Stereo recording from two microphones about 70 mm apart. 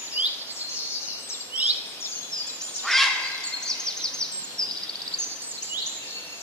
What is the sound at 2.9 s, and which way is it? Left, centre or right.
Duck, centre.